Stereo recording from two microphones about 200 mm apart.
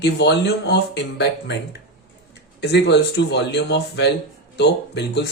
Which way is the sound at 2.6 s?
55° left (ahead or behind).